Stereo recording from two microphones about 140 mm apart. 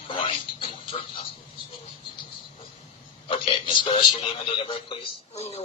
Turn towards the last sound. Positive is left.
turn(degrees=50)  # may be behind; listen again after turning